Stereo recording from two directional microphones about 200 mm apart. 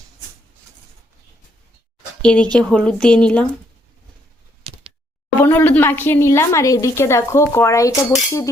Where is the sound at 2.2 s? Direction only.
5° left (ahead or behind).